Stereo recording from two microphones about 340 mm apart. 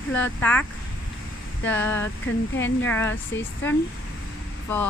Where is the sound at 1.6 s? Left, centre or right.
Centre.